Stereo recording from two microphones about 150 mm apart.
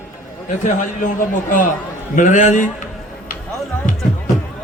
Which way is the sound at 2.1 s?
60° left (ahead or behind).